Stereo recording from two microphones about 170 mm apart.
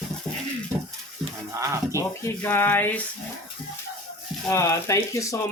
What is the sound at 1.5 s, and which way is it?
Speech, 15° right (ahead or behind).